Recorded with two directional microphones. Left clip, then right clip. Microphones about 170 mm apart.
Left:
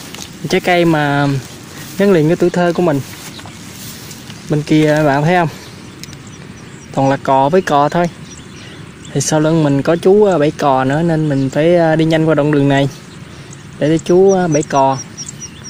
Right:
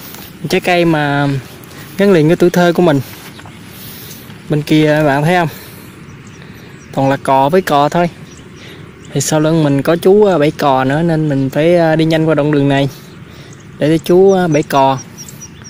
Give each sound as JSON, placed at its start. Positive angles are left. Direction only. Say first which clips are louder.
{"t": 0.5, "sound": "speech", "louder": "even", "side_deg": -5}
{"t": 2.2, "sound": "speech", "louder": "right 3 dB", "side_deg": -25}
{"t": 4.5, "sound": "speech", "louder": "right 1 dB", "side_deg": -10}
{"t": 7.0, "sound": "speech", "louder": "right 1 dB", "side_deg": -10}
{"t": 9.1, "sound": "speech", "louder": "right 1 dB", "side_deg": -10}